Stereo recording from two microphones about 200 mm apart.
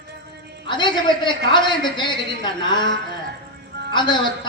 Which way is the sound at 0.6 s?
20° left (ahead or behind).